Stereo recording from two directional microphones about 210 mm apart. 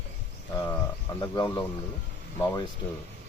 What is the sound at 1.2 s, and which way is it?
Speech, 15° left (ahead or behind).